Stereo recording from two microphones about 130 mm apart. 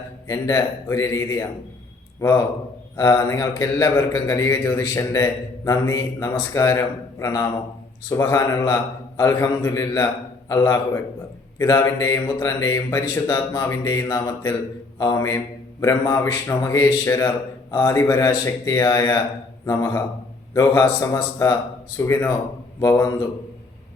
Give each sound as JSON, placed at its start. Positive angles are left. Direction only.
{"t": 0.3, "sound": "a man's voice", "side_deg": 25}
{"t": 2.9, "sound": "a man's voice", "side_deg": 25}
{"t": 14.9, "sound": "mantra", "side_deg": 25}
{"t": 15.8, "sound": "a man's voice", "side_deg": 25}